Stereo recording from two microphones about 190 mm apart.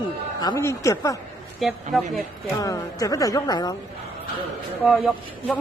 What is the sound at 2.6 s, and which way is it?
Speech, 20° left (ahead or behind).